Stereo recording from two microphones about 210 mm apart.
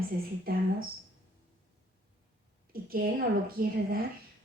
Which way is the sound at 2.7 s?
45° right (ahead or behind).